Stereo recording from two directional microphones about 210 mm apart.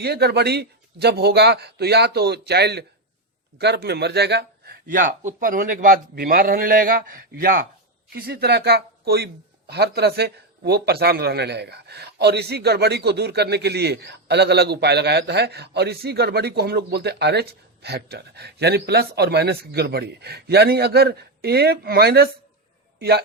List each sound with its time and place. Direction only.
0.0 s a man's voice: 50° right (ahead or behind)